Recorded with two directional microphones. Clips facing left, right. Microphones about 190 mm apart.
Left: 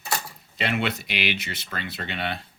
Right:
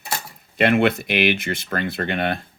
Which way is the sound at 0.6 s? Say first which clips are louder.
Right 9 dB; 55° right (ahead or behind).